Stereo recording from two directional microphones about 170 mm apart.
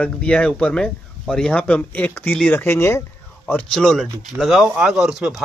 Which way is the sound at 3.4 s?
5° left (ahead or behind).